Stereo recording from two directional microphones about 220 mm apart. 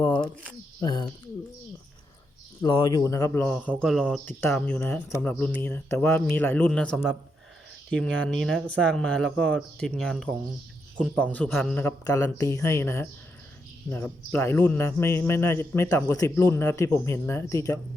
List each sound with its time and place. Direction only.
0.8 s speech: 20° left (ahead or behind)
2.6 s a man's voice: 20° left (ahead or behind)